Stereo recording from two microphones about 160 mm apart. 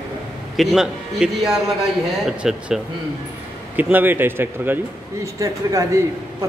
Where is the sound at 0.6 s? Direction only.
Centre (ahead or behind); by 5.9 s 20° right (ahead or behind).